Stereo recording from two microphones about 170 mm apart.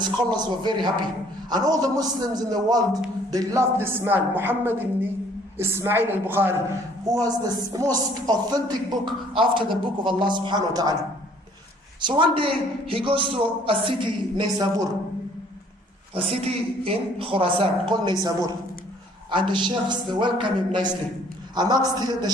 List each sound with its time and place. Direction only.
0.0 s speech: 25° right (ahead or behind)
11.9 s a man's voice: 25° right (ahead or behind)
16.1 s a man's voice: 35° right (ahead or behind)